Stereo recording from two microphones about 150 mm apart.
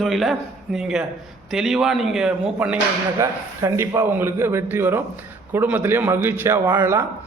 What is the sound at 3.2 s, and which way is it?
A man's voice, 20° right (ahead or behind).